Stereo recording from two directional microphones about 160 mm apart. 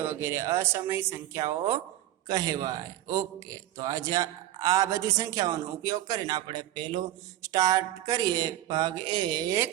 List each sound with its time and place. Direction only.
0.0 s a man's voice: 15° right (ahead or behind)